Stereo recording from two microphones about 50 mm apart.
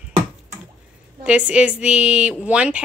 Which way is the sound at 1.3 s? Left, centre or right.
Right.